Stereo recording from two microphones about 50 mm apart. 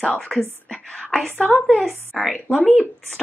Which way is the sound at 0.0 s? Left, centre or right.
Left.